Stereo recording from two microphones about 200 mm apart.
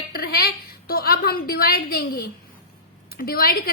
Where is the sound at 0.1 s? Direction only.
50° left (ahead or behind).